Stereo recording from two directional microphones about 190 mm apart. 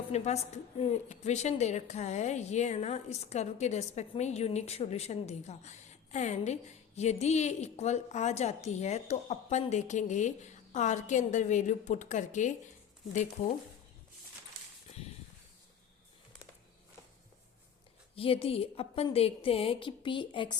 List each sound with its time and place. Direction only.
0.1 s a woman's voice: 35° left (ahead or behind)
18.1 s a woman's voice: 30° left (ahead or behind)